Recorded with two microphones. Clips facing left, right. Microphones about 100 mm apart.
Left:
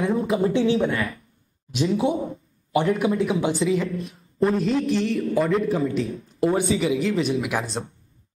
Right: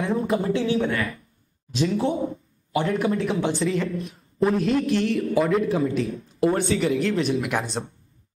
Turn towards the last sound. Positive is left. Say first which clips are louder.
# even
turn(degrees=0)  # may be behind; listen again after turning